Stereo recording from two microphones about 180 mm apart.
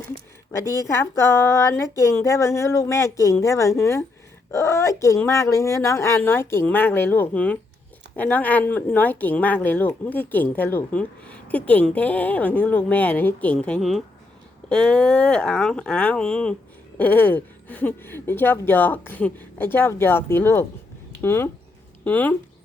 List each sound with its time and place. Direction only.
0.8 s speech: 15° left (ahead or behind)